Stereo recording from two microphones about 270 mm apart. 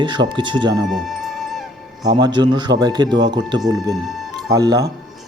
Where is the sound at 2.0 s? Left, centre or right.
Centre.